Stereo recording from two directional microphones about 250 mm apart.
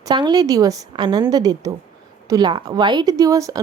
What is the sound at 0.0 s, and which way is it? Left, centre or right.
A woman's voice, centre.